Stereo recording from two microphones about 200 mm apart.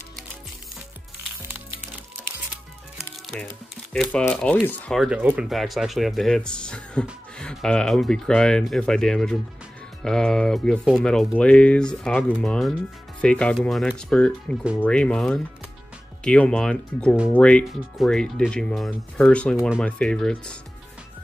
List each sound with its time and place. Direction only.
3.0 s speech: 5° left (ahead or behind)